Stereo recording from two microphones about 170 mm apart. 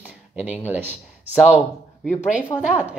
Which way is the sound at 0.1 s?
5° right (ahead or behind).